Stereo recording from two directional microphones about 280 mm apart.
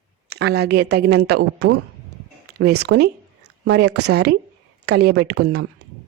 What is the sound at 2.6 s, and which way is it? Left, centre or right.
Speech, right.